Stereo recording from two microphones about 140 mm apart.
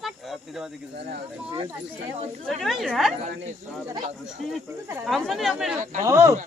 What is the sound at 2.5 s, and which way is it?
Speech, centre (ahead or behind).